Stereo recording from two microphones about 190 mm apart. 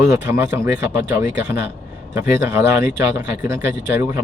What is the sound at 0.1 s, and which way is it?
Speech, 15° right (ahead or behind).